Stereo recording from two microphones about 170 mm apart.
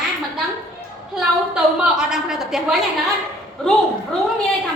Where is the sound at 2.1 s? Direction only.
5° right (ahead or behind).